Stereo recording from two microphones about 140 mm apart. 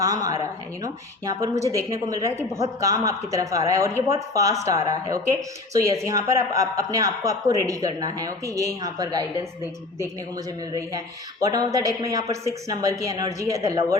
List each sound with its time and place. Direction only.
0.0 s a woman's voice: 25° right (ahead or behind)
10.8 s a woman's voice: 25° right (ahead or behind)